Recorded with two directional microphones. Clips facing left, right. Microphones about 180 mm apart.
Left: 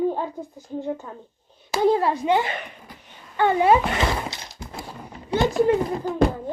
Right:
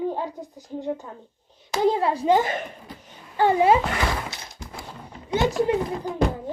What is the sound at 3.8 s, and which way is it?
Speech, 20° left (ahead or behind).